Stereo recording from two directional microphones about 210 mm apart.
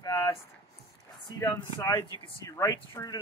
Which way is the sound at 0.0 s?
15° left (ahead or behind).